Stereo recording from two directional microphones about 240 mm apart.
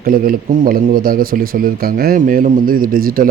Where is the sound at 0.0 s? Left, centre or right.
Right.